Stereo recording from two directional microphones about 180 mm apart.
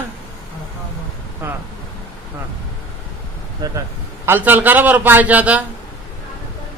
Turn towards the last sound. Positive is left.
turn(degrees=-10)  # may be behind; listen again after turning